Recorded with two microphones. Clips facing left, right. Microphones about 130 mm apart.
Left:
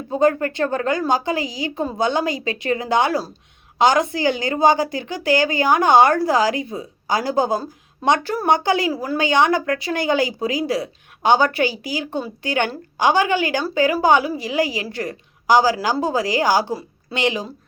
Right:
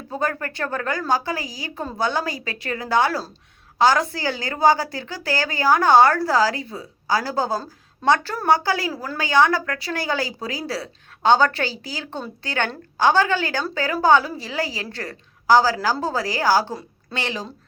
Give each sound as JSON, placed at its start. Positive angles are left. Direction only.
{"t": 0.1, "sound": "a woman's voice", "side_deg": 20}